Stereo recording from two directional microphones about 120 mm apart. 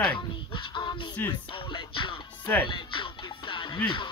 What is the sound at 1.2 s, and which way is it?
Music, 15° left (ahead or behind).